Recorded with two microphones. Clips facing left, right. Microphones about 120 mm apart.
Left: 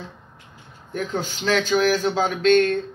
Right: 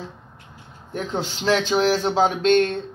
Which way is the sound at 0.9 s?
25° right (ahead or behind).